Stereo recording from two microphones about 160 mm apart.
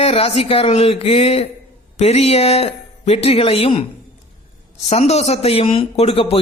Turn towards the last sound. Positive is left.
turn(degrees=35)  # may be behind; listen again after turning